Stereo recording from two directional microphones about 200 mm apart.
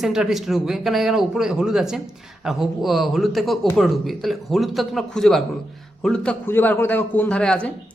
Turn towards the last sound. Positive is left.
turn(degrees=5)  # may be behind; listen again after turning